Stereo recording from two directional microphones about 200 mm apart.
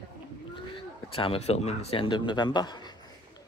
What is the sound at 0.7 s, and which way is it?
Speech, 25° left (ahead or behind).